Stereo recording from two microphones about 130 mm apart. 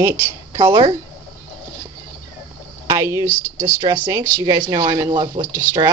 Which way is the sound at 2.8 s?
25° right (ahead or behind).